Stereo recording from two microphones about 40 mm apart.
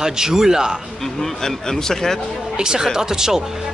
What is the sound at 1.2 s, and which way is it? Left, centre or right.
Speech, centre.